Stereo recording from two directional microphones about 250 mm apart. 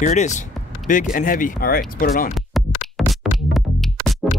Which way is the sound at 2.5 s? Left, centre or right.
Centre.